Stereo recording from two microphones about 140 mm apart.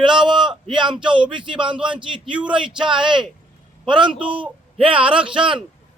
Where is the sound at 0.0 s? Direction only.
35° right (ahead or behind).